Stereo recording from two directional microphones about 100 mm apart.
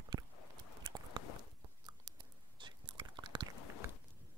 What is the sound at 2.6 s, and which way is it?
Chewing, 50° right (ahead or behind).